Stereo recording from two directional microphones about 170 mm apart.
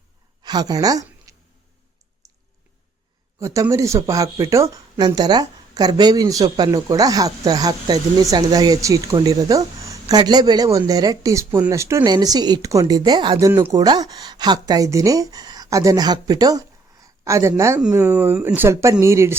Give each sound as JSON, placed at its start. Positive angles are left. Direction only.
{"t": 0.4, "sound": "a sound", "side_deg": -25}
{"t": 3.4, "sound": "speech", "side_deg": -20}
{"t": 13.5, "sound": "speech", "side_deg": -15}